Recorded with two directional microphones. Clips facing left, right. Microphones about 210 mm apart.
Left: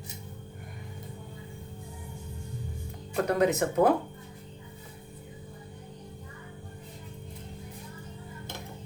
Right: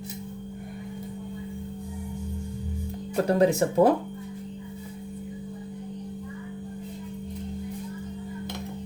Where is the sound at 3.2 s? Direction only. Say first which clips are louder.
Right 4 dB; 30° right (ahead or behind).